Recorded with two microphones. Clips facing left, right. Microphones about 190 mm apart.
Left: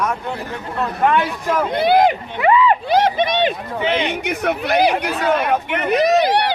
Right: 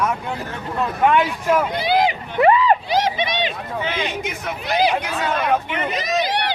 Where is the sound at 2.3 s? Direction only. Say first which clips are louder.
Right 2 dB; 35° right (ahead or behind).